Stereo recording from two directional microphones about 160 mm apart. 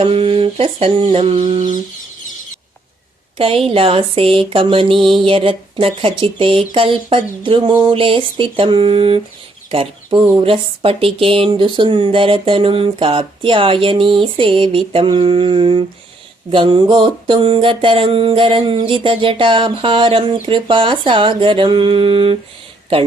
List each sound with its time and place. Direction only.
0.0 s speech: 35° right (ahead or behind)
3.3 s a woman's voice: 35° right (ahead or behind)